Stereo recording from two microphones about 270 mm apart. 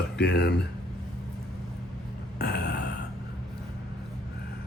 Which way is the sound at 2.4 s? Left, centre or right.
Left.